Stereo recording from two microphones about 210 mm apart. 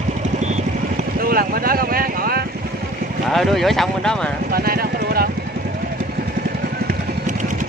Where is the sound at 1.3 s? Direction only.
45° right (ahead or behind).